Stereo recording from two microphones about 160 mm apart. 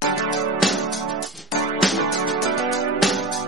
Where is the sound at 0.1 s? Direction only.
Centre (ahead or behind).